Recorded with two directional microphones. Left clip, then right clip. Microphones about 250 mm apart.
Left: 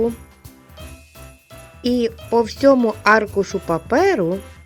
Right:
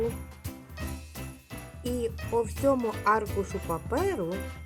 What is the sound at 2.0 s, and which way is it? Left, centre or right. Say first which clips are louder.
Speech: left 9 dB; left.